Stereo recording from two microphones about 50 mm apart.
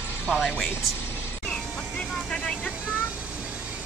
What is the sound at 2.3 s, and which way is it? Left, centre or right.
Vehicle, centre.